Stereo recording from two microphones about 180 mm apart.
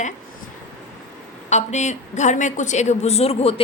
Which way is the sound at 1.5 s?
40° left (ahead or behind).